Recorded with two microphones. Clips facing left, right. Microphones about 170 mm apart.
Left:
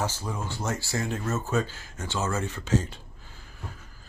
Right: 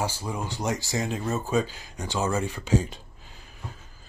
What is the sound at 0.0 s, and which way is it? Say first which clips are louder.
Speech: right 1 dB; 10° right (ahead or behind).